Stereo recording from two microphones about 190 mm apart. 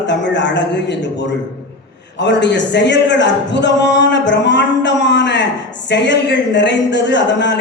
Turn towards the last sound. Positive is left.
turn(degrees=65)  # may be behind; listen again after turning